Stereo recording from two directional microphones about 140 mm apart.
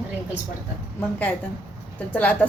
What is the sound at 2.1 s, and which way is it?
Speech, 10° left (ahead or behind).